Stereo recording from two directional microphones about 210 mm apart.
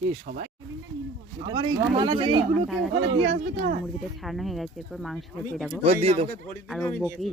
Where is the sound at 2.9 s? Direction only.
60° right (ahead or behind).